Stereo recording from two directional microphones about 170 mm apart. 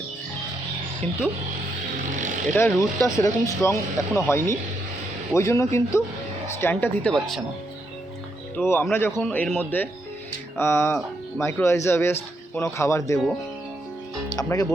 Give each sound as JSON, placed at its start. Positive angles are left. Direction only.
{"t": 1.0, "sound": "speech", "side_deg": 5}
{"t": 2.1, "sound": "speech", "side_deg": -45}
{"t": 2.6, "sound": "speech", "side_deg": 10}
{"t": 8.5, "sound": "speech", "side_deg": 15}
{"t": 14.3, "sound": "speech", "side_deg": 20}